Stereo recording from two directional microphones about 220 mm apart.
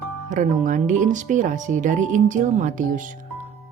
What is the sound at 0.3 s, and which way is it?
Speech, 35° right (ahead or behind).